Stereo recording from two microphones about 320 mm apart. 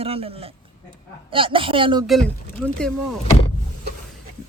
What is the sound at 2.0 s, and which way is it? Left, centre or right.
Speech, centre.